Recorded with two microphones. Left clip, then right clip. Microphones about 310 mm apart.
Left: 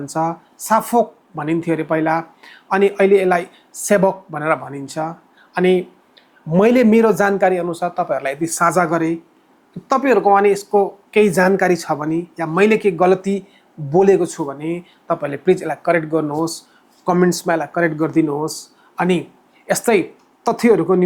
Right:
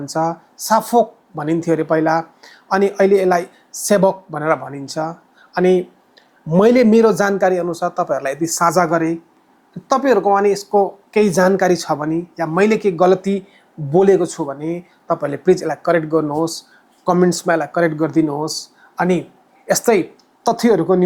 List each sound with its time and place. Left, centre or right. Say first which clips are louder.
0.1 s speech: right 1 dB; centre